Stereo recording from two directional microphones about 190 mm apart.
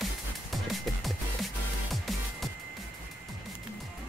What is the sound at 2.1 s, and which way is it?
Music, centre (ahead or behind).